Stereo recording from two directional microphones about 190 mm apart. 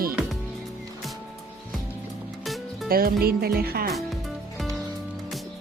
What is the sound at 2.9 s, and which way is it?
Music, 50° right (ahead or behind).